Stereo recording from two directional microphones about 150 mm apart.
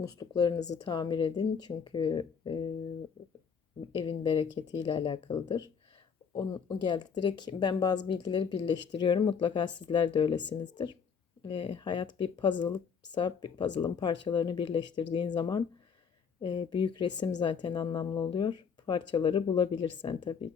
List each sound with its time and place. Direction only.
0.0 s a woman's voice: 25° left (ahead or behind)
3.8 s speech: 35° left (ahead or behind)